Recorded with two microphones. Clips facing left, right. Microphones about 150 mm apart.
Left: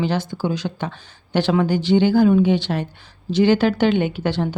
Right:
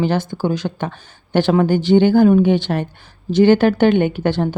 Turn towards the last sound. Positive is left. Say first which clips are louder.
# right 4 dB
turn(degrees=-50)  # may be behind; listen again after turning